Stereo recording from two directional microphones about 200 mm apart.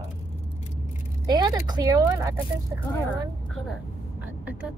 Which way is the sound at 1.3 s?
20° right (ahead or behind).